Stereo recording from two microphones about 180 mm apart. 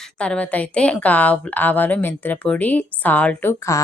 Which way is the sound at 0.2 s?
5° left (ahead or behind).